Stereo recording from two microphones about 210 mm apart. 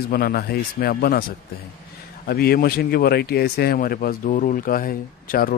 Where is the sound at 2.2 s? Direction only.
45° left (ahead or behind).